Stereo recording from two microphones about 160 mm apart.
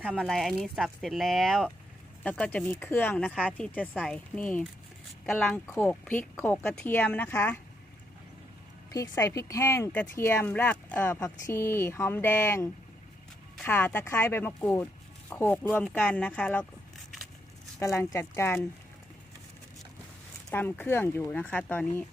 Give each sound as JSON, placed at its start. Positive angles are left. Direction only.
{"t": 0.2, "sound": "speech", "side_deg": 0}
{"t": 8.9, "sound": "speech", "side_deg": 20}
{"t": 17.7, "sound": "speech", "side_deg": 15}
{"t": 20.5, "sound": "speech", "side_deg": 10}